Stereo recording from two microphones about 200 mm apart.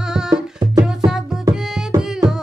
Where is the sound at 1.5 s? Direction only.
20° right (ahead or behind).